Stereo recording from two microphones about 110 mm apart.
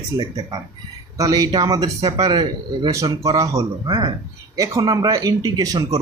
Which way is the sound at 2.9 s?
30° right (ahead or behind).